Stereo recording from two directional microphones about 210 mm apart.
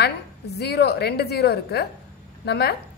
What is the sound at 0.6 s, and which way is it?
A woman's voice, 50° left (ahead or behind).